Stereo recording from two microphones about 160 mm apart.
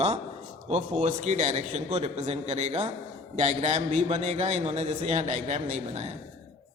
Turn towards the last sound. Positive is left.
turn(degrees=-50)  # may be behind; listen again after turning